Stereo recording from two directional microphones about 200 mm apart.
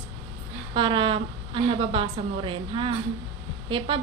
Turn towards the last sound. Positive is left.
turn(degrees=-25)  # may be behind; listen again after turning